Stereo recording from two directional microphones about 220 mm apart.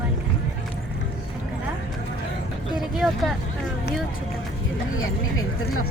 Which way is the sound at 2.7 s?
Centre (ahead or behind).